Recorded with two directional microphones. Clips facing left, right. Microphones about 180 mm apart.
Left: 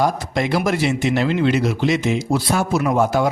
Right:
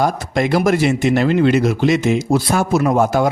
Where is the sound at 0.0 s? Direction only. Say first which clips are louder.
Right 2 dB; 50° right (ahead or behind).